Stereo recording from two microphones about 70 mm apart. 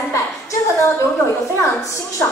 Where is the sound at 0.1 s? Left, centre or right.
Left.